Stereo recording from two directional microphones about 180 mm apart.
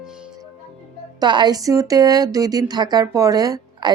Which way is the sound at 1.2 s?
25° right (ahead or behind).